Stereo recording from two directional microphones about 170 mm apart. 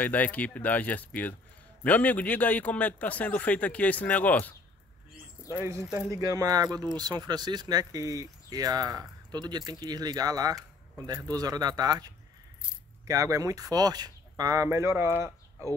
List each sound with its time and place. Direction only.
0.0 s a man's voice: 10° left (ahead or behind)
5.5 s speech: 15° right (ahead or behind)